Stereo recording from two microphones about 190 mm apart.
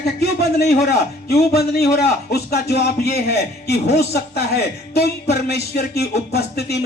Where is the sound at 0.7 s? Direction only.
60° left (ahead or behind).